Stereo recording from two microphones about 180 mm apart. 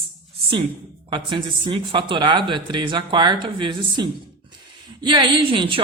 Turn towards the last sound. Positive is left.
turn(degrees=-30)  # may be behind; listen again after turning